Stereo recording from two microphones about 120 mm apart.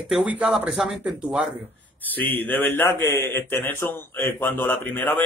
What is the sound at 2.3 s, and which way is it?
A man's voice, 15° left (ahead or behind).